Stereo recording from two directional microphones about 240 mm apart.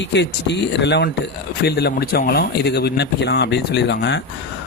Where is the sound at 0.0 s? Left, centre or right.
Left.